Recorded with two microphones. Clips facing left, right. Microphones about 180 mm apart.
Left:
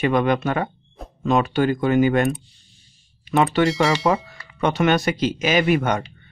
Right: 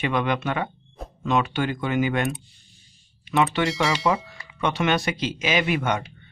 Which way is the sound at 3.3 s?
40° left (ahead or behind).